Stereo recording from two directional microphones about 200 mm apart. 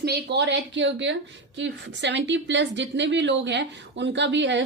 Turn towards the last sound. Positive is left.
turn(degrees=-65)  # may be behind; listen again after turning